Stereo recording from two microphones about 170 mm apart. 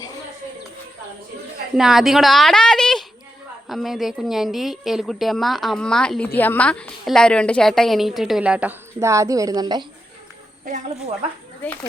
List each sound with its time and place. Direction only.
1.7 s a woman's voice: centre (ahead or behind); by 9.8 s 25° right (ahead or behind)
10.7 s speech: 45° right (ahead or behind)